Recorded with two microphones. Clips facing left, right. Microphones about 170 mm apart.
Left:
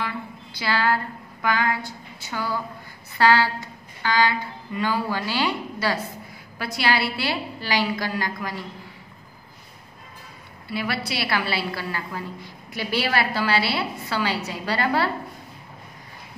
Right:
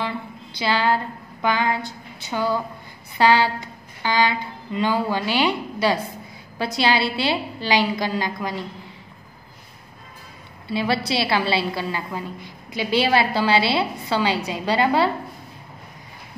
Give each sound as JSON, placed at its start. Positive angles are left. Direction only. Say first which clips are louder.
{"t": 0.6, "sound": "a woman's voice", "louder": "right 2 dB", "side_deg": -20}
{"t": 1.9, "sound": "a sound", "louder": "right 4 dB", "side_deg": -20}
{"t": 3.2, "sound": "a woman's voice", "louder": "right 2 dB", "side_deg": -20}
{"t": 10.7, "sound": "a woman's voice", "louder": "right 5 dB", "side_deg": -25}